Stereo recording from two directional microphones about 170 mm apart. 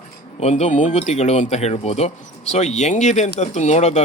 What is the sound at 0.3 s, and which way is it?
Speech, 40° left (ahead or behind).